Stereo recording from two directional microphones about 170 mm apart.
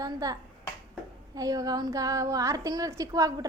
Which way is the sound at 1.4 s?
20° right (ahead or behind).